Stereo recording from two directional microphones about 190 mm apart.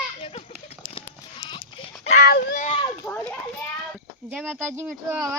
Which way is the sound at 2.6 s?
30° left (ahead or behind).